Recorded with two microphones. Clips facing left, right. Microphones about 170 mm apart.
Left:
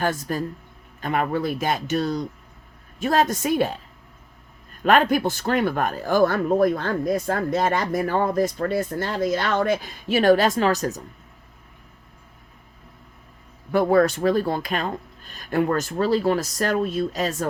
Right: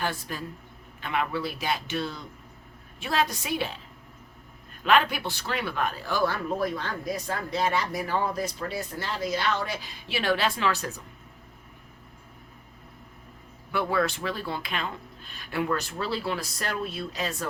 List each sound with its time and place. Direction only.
0.0 s speech: 45° left (ahead or behind)
4.8 s speech: 45° left (ahead or behind)
13.7 s speech: 40° left (ahead or behind)